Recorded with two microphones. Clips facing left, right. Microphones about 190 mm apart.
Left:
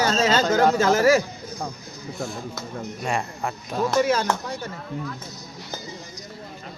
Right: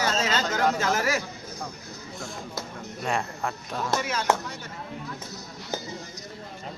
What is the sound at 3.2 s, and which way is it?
Speech, 15° left (ahead or behind).